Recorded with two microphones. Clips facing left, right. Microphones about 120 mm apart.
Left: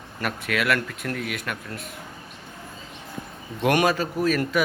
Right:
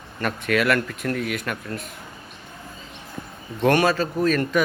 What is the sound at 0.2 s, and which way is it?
Speech, 5° left (ahead or behind).